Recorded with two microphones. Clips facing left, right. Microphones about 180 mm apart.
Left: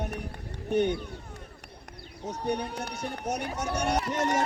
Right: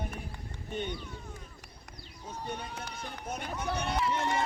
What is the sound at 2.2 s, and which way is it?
Speech, 75° left (ahead or behind).